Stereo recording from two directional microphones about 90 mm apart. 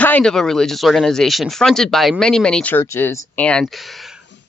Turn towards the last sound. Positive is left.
turn(degrees=25)  # may be behind; listen again after turning